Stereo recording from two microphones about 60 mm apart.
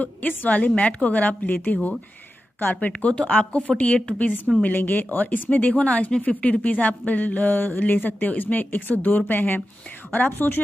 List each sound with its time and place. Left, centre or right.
0.0 s speech: left